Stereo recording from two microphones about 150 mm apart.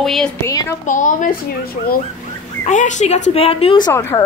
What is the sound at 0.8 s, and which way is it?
Speech, 60° left (ahead or behind).